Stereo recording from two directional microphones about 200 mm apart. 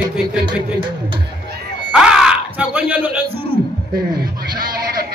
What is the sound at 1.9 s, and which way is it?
Music, 5° right (ahead or behind).